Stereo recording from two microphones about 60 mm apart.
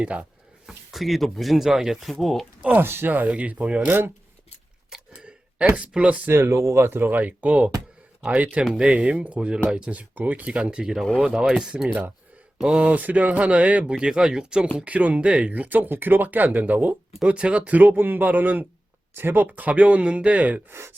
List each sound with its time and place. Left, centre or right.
0.0 s speech: right
0.7 s speech: centre
2.7 s speech: right
3.1 s speech: right
4.9 s a sound: centre
6.3 s speech: right
6.9 s speech: right; by 14.7 s centre
14.8 s speech: right
20.7 s speech: right